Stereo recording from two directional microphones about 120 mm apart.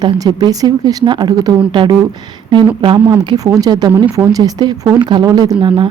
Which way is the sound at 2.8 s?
45° right (ahead or behind).